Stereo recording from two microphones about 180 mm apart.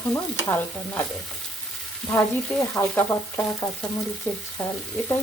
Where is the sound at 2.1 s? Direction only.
5° left (ahead or behind).